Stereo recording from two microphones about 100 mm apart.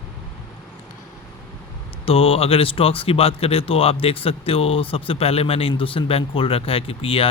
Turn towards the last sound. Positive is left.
turn(degrees=70)  # may be behind; listen again after turning